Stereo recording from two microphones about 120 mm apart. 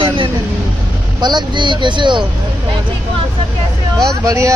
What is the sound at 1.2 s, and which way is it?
A child's voice, 40° right (ahead or behind).